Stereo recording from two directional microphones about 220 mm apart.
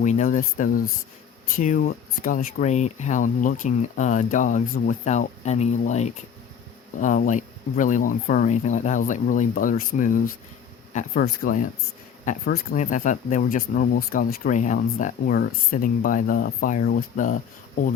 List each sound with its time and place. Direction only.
0.0 s speech: 35° left (ahead or behind)